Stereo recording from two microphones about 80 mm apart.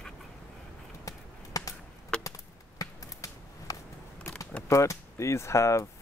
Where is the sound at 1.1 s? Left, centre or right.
Left.